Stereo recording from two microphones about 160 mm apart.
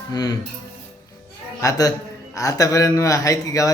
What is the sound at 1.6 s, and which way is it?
Speech, 20° left (ahead or behind).